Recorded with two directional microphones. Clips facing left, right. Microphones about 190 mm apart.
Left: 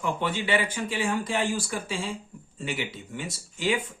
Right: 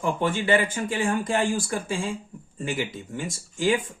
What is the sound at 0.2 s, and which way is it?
Speech, 45° right (ahead or behind).